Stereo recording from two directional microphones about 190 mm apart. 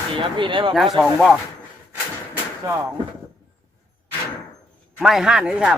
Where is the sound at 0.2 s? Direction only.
25° right (ahead or behind).